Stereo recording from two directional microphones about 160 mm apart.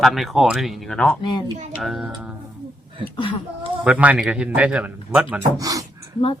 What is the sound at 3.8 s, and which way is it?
Speech, 5° right (ahead or behind).